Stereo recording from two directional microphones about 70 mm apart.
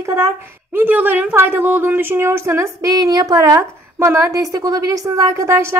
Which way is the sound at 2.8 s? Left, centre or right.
Right.